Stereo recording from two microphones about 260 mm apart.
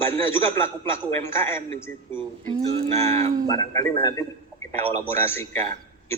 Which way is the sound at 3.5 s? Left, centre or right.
Centre.